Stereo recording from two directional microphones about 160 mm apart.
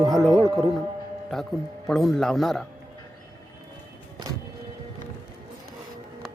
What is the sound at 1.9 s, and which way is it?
Speech, centre (ahead or behind).